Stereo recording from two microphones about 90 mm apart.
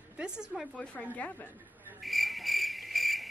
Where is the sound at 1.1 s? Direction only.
20° left (ahead or behind).